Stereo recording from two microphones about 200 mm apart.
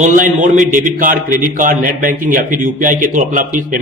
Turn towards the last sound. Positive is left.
turn(degrees=-40)  # may be behind; listen again after turning